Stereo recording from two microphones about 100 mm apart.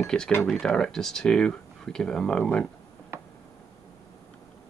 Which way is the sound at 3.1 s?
25° right (ahead or behind).